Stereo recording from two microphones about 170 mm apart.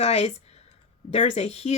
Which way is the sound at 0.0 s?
40° left (ahead or behind).